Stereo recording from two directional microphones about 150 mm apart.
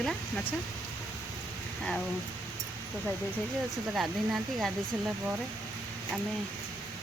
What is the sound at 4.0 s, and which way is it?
Speech, centre (ahead or behind).